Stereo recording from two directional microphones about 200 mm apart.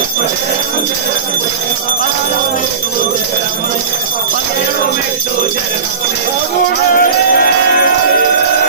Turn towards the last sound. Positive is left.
turn(degrees=45)  # may be behind; listen again after turning